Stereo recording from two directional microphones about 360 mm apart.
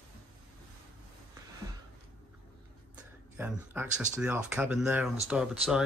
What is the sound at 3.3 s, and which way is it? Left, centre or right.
Speech, centre.